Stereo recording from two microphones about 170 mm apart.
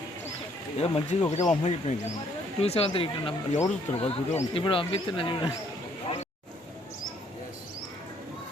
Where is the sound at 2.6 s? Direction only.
35° left (ahead or behind).